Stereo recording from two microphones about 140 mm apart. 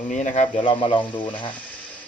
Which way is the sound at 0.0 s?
60° left (ahead or behind).